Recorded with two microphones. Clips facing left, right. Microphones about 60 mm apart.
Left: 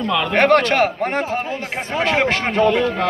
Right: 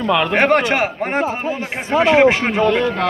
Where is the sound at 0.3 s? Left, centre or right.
Centre.